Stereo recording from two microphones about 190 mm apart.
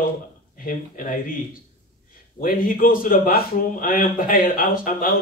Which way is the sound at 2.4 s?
45° left (ahead or behind).